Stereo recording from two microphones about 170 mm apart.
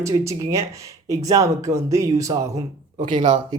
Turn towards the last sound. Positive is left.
turn(degrees=-50)  # may be behind; listen again after turning